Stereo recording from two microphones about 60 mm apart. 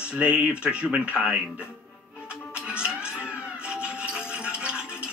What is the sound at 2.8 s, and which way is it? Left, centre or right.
Music, centre.